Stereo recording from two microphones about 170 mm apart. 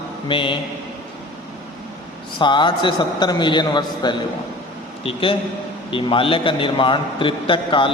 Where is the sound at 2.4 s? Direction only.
25° left (ahead or behind).